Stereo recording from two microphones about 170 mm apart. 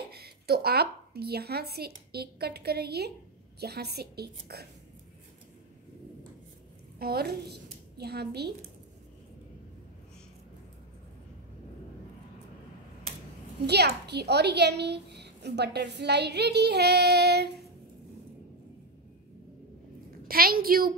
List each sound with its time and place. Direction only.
0.1 s a woman's voice: 65° right (ahead or behind)
7.0 s a woman's voice: 65° right (ahead or behind)
13.7 s a woman's voice: 75° right (ahead or behind)
20.2 s a woman's voice: 60° right (ahead or behind)